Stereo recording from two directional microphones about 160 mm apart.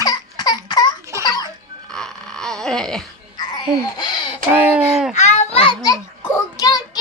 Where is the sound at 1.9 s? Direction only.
5° left (ahead or behind).